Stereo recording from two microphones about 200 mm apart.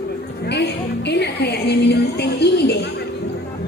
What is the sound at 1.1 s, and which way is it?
Music, 55° left (ahead or behind).